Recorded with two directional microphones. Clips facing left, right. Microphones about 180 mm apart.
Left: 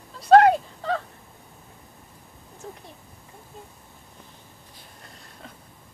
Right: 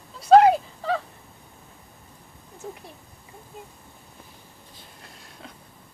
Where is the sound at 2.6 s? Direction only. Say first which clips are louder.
Right 3 dB; 5° right (ahead or behind).